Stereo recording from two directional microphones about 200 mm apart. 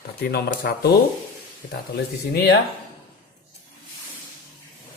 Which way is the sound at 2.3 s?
55° left (ahead or behind).